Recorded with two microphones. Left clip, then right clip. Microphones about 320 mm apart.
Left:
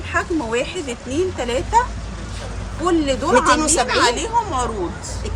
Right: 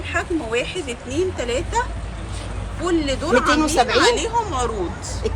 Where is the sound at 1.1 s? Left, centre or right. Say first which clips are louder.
Left 1 dB; left.